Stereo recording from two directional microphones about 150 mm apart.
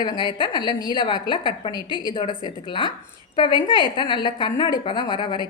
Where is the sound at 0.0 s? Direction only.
30° left (ahead or behind).